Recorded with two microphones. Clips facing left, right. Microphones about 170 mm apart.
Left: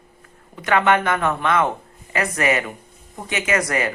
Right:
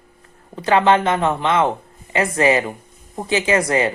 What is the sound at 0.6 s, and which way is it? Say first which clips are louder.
Speech: right 3 dB; 30° right (ahead or behind).